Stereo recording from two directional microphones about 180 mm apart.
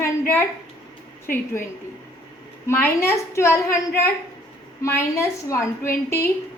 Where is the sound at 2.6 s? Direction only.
10° left (ahead or behind).